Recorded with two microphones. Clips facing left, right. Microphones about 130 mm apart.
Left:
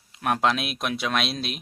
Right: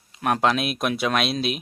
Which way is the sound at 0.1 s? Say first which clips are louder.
Right 2 dB; centre (ahead or behind).